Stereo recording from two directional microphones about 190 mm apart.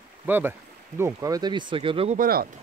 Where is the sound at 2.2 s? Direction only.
50° right (ahead or behind).